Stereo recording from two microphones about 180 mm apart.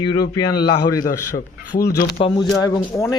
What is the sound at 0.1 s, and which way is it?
Speech, 20° left (ahead or behind).